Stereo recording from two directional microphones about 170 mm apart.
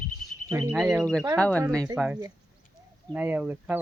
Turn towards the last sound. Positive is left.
turn(degrees=-10)  # may be behind; listen again after turning